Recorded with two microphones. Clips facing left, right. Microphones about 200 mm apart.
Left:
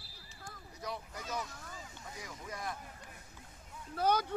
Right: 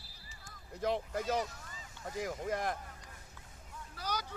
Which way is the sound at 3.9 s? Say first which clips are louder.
Left 9 dB; 55° left (ahead or behind).